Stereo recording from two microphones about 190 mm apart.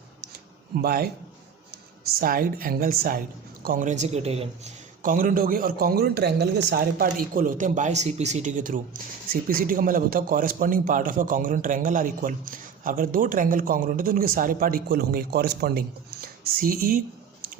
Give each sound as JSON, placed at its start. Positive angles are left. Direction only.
{"t": 0.8, "sound": "speech", "side_deg": -55}
{"t": 2.1, "sound": "a man's voice", "side_deg": -50}
{"t": 5.0, "sound": "speech", "side_deg": -45}